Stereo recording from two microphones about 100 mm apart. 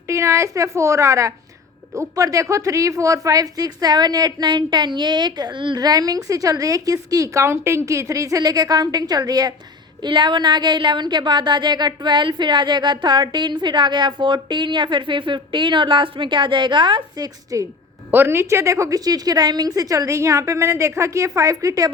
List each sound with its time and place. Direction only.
0.1 s a woman's voice: 30° right (ahead or behind); by 17.2 s 55° right (ahead or behind)
17.5 s a woman's voice: 30° right (ahead or behind)